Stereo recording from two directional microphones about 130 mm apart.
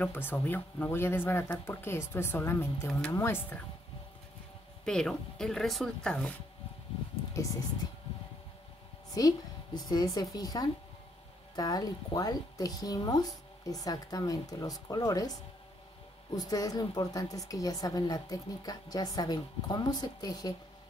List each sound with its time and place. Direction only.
0.0 s speech: 15° left (ahead or behind)
4.8 s speech: 5° left (ahead or behind)
7.3 s speech: 25° left (ahead or behind)
9.2 s a woman's voice: 30° left (ahead or behind)
16.3 s a woman's voice: 30° left (ahead or behind)